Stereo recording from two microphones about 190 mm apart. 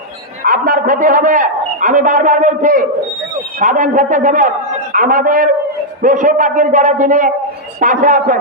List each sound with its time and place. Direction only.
0.4 s a man's voice: 45° right (ahead or behind)